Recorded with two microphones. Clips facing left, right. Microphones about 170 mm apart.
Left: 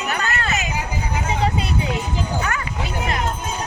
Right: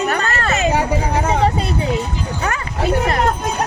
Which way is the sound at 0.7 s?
75° right (ahead or behind).